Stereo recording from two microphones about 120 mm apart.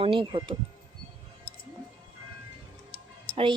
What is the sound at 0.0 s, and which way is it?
Speech, 45° right (ahead or behind).